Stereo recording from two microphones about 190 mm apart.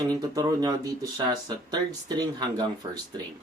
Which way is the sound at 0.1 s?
20° right (ahead or behind).